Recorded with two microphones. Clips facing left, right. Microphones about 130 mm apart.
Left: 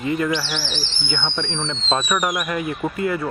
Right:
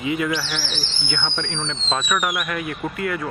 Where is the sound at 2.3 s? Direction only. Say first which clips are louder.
Left 2 dB; 20° left (ahead or behind).